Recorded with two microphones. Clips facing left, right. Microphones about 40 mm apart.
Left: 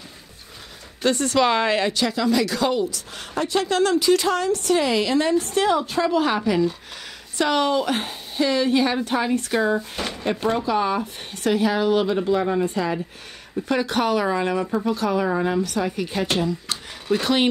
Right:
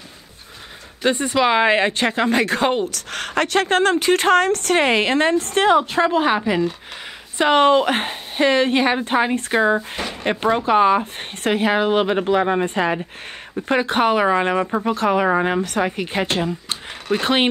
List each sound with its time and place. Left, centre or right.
1.0 s a woman's voice: right
2.9 s speech: right
3.6 s a woman's voice: right